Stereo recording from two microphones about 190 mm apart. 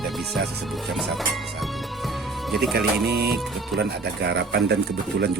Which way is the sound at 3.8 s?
60° right (ahead or behind).